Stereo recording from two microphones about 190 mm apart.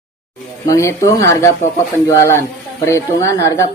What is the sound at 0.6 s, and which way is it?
Speech, 15° left (ahead or behind).